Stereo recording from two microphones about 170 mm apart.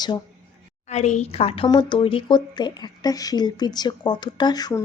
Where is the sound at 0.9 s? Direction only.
40° left (ahead or behind).